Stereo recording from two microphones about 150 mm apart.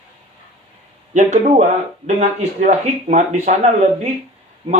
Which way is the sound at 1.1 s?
50° right (ahead or behind).